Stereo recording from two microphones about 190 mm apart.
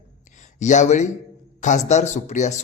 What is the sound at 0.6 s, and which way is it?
A man's voice, 40° left (ahead or behind).